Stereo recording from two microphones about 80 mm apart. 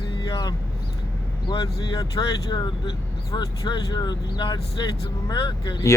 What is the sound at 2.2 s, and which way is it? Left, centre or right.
Speech, left.